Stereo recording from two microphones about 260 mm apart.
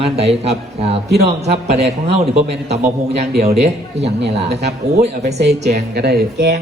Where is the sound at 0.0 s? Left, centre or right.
Right.